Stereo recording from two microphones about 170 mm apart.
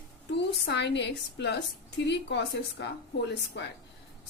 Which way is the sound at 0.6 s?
90° left.